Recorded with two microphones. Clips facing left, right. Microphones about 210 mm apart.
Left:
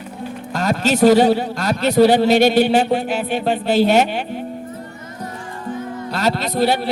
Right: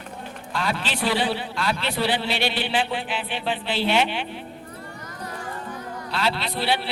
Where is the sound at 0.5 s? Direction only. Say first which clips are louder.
Left 9 dB; 45° left (ahead or behind).